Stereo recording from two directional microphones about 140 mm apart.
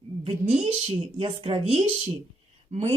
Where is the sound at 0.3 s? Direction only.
45° right (ahead or behind).